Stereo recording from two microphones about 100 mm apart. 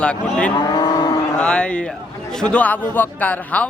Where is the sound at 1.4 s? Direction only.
10° left (ahead or behind).